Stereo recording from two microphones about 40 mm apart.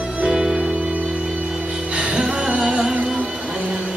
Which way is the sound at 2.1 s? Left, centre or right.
Right.